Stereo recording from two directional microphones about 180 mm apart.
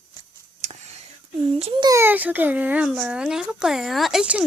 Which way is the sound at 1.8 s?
15° right (ahead or behind).